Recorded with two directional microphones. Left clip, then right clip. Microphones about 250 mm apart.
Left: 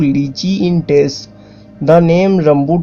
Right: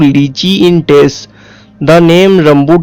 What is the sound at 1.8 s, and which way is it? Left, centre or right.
Speech, right.